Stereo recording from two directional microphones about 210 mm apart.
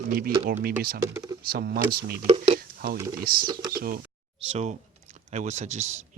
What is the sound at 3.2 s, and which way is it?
Speech, 45° right (ahead or behind).